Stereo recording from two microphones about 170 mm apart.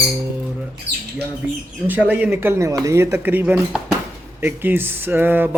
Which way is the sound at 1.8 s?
10° right (ahead or behind).